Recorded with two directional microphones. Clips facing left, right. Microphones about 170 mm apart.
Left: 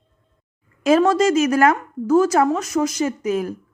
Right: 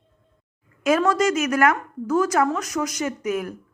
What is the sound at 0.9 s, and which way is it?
Speech, 25° left (ahead or behind).